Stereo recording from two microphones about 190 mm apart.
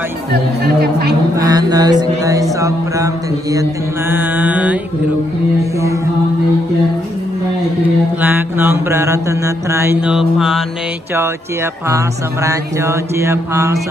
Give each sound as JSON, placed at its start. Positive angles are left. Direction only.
{"t": 0.3, "sound": "speech", "side_deg": -55}
{"t": 1.3, "sound": "speech", "side_deg": -20}
{"t": 4.1, "sound": "mantra", "side_deg": -10}
{"t": 8.2, "sound": "mantra", "side_deg": -10}
{"t": 11.9, "sound": "mantra", "side_deg": -15}